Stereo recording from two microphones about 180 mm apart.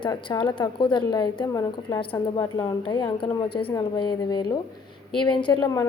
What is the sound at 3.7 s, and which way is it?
A woman's voice, 25° left (ahead or behind).